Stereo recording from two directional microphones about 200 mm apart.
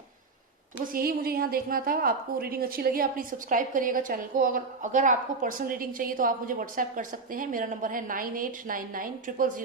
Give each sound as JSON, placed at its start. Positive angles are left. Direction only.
{"t": 0.9, "sound": "a woman's voice", "side_deg": -50}